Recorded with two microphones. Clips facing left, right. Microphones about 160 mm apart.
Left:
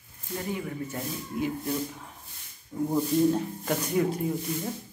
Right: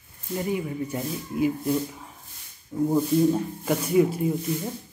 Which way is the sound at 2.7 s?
15° right (ahead or behind).